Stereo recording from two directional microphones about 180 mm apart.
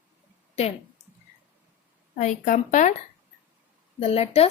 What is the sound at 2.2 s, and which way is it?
Speech, 40° left (ahead or behind).